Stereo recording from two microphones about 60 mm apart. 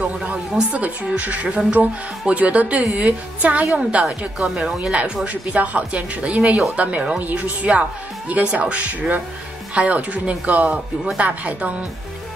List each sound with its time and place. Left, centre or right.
0.0 s speech: centre
4.4 s speech: centre